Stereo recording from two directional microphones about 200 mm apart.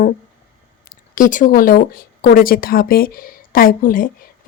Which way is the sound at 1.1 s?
40° left (ahead or behind).